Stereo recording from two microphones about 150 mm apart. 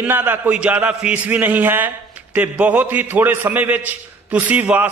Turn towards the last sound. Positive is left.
turn(degrees=-10)  # may be behind; listen again after turning